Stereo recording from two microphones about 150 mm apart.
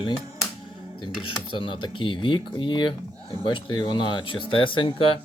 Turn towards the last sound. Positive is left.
turn(degrees=35)  # may be behind; listen again after turning